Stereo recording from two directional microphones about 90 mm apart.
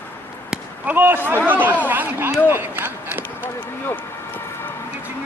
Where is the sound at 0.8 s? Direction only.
20° right (ahead or behind).